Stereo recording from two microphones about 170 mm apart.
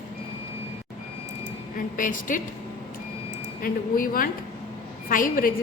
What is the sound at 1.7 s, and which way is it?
Speech, 55° left (ahead or behind).